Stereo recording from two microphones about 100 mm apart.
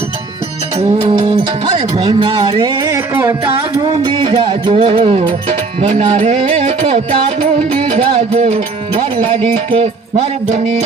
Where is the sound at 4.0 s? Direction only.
60° right (ahead or behind).